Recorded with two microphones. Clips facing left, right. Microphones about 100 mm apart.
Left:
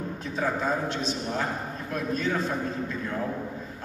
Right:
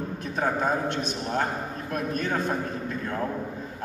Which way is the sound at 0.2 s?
55° right (ahead or behind).